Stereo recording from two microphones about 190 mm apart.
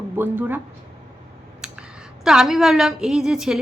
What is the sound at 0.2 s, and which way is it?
Speech, 10° right (ahead or behind).